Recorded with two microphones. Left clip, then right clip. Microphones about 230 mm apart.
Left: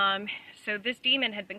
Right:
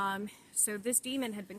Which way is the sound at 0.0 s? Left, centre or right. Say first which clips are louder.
Left 8 dB; centre.